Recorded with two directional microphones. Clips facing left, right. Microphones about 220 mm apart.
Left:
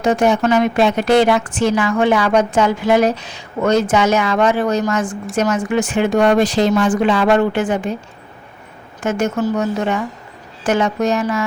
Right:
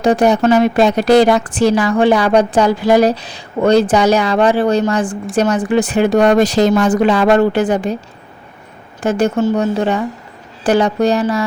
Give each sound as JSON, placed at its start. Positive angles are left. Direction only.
{"t": 0.0, "sound": "a woman's voice", "side_deg": -35}
{"t": 9.0, "sound": "a woman's voice", "side_deg": -35}